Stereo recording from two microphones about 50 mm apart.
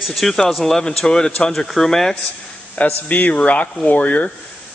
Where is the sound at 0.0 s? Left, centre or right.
Centre.